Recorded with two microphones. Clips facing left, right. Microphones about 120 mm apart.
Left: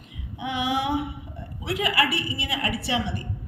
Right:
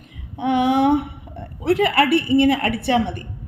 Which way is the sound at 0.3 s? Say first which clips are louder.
Right 9 dB; 55° right (ahead or behind).